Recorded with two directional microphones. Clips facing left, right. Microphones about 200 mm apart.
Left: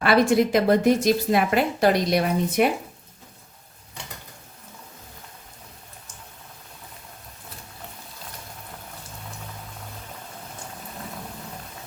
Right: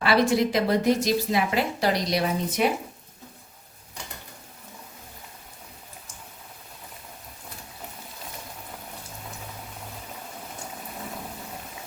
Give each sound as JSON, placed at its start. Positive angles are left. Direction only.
{"t": 0.0, "sound": "speech", "side_deg": 55}